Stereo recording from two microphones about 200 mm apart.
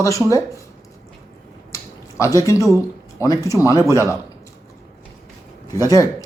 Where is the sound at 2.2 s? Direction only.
15° left (ahead or behind).